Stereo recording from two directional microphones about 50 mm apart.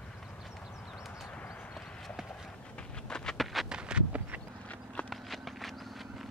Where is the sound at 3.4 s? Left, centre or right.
Centre.